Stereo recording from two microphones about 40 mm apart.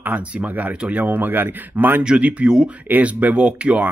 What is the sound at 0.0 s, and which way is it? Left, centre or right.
Speech, right.